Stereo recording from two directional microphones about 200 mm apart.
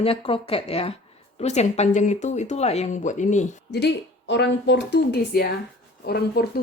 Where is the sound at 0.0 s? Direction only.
30° left (ahead or behind).